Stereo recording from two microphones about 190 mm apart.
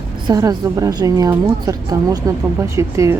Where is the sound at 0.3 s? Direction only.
20° right (ahead or behind).